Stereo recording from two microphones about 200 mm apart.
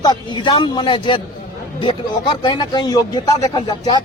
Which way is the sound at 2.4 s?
20° left (ahead or behind).